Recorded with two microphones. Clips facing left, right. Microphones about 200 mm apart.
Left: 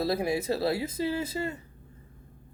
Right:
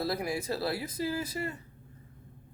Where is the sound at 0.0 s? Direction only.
25° left (ahead or behind).